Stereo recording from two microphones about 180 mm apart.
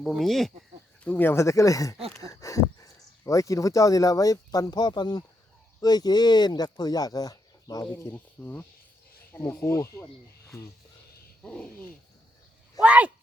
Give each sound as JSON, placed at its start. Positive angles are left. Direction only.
{"t": 0.0, "sound": "speech", "side_deg": 0}
{"t": 11.4, "sound": "speech", "side_deg": 5}
{"t": 12.8, "sound": "speech", "side_deg": -10}